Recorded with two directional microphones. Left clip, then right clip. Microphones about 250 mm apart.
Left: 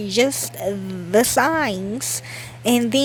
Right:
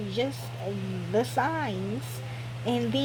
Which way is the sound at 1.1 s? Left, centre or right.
Left.